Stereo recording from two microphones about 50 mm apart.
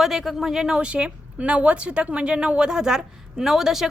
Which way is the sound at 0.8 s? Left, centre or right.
Right.